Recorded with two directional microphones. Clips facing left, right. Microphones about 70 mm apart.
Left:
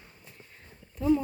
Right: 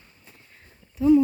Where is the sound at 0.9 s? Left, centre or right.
Centre.